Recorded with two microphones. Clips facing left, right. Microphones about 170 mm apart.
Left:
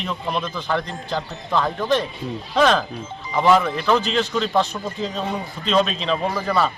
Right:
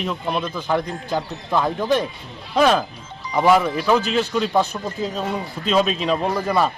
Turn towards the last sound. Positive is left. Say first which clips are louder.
# right 1 dB
turn(degrees=-10)  # may be behind; listen again after turning